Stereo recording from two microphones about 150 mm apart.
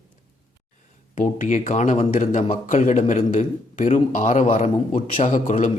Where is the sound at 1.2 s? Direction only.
55° left (ahead or behind).